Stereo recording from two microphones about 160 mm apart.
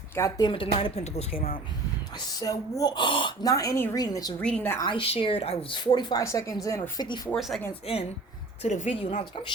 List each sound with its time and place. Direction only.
0.2 s a woman's voice: 25° left (ahead or behind)
2.4 s a woman's voice: 20° left (ahead or behind)
4.4 s a woman's voice: 10° left (ahead or behind)
4.8 s a woman's voice: 30° left (ahead or behind)
7.3 s speech: centre (ahead or behind)
8.6 s a woman's voice: 45° left (ahead or behind)